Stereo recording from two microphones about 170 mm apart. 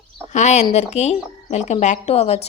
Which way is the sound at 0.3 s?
40° left (ahead or behind).